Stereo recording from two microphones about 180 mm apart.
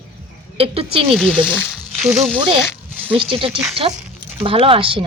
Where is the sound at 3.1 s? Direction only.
30° right (ahead or behind).